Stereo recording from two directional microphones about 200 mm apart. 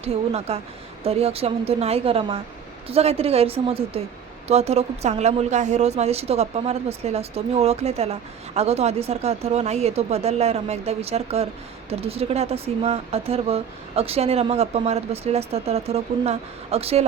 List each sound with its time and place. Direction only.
0.0 s a woman's voice: 30° right (ahead or behind)